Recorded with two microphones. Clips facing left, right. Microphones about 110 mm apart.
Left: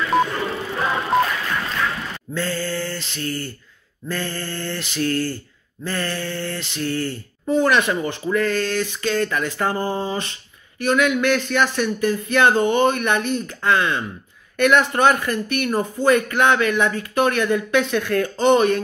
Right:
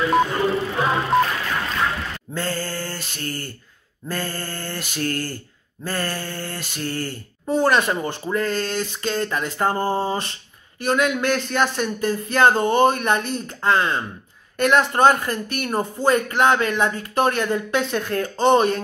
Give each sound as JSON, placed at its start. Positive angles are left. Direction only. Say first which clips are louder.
{"t": 0.1, "sound": "music", "louder": "left 1 dB", "side_deg": 0}
{"t": 2.3, "sound": "mantra", "louder": "left 2 dB", "side_deg": -45}
{"t": 7.5, "sound": "speech", "louder": "left 1 dB", "side_deg": -35}